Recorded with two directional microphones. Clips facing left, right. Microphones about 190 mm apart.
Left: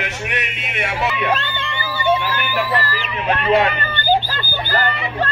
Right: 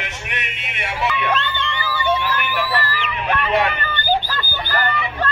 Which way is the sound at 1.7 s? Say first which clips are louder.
Left 3 dB; 25° left (ahead or behind).